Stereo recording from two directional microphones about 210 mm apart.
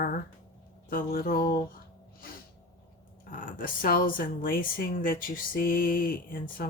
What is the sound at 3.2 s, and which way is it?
Speech, 40° left (ahead or behind).